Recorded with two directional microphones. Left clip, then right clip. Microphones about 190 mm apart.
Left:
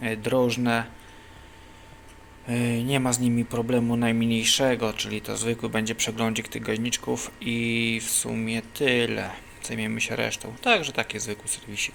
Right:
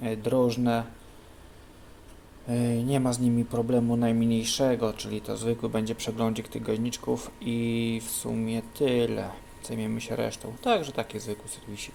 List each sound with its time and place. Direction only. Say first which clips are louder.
0.0 s speech: left 2 dB; 5° right (ahead or behind)
2.5 s speech: left 2 dB; 5° right (ahead or behind)